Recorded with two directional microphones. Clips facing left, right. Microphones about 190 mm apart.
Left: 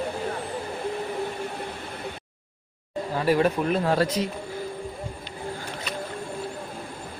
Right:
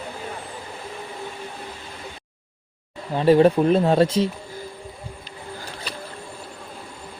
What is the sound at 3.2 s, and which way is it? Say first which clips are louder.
Speech: right 7 dB; 25° right (ahead or behind).